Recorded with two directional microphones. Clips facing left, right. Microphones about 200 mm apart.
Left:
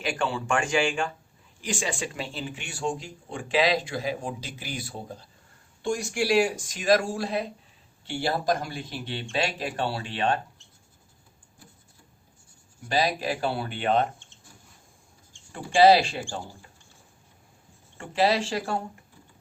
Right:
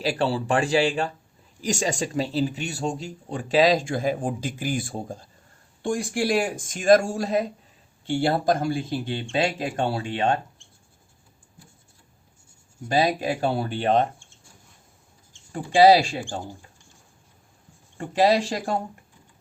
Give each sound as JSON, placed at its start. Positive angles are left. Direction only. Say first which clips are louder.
{"t": 0.0, "sound": "speech", "louder": "right 5 dB", "side_deg": -35}
{"t": 8.3, "sound": "speech", "louder": "right 2 dB", "side_deg": -25}
{"t": 13.1, "sound": "speech", "louder": "right 4 dB", "side_deg": -45}
{"t": 15.5, "sound": "speech", "louder": "right 2 dB", "side_deg": -15}
{"t": 18.2, "sound": "speech", "louder": "right 4 dB", "side_deg": -40}